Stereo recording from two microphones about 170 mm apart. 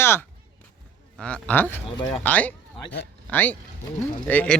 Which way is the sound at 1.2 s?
5° left (ahead or behind).